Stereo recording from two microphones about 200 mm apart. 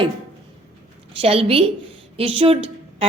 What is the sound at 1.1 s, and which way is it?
A woman's voice, 25° right (ahead or behind).